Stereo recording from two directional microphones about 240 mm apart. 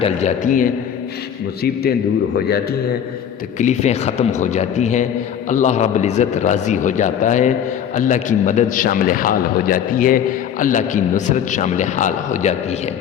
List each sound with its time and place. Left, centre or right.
0.0 s a man's voice: left
3.6 s a man's voice: left